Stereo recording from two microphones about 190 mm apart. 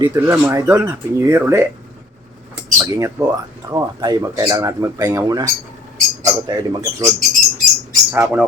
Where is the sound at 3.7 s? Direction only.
20° right (ahead or behind).